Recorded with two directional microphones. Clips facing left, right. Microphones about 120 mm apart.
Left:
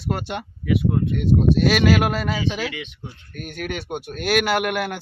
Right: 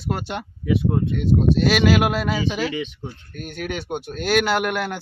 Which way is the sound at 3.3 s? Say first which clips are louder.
Even; centre (ahead or behind).